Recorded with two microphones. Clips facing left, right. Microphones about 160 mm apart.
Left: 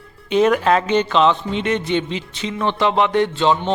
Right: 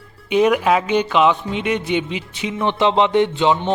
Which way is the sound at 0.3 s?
10° right (ahead or behind).